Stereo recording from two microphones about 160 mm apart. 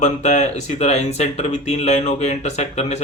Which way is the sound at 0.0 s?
45° left (ahead or behind).